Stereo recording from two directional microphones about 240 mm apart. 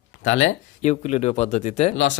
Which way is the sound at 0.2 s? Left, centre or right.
Left.